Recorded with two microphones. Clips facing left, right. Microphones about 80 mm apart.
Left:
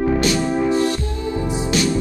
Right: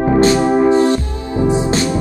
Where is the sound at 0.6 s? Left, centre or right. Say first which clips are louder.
Right 6 dB; right.